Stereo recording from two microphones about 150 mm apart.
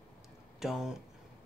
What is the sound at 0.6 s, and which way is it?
Speech, 5° right (ahead or behind).